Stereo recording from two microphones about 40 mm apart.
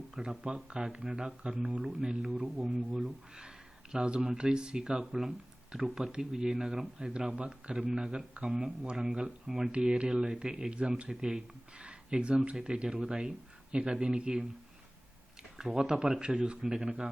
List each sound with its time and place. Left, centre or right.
0.2 s speech: centre
9.7 s speech: right
10.7 s speech: right
11.1 s speech: centre
15.5 s speech: centre